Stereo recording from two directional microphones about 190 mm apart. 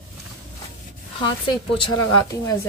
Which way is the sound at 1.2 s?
25° left (ahead or behind).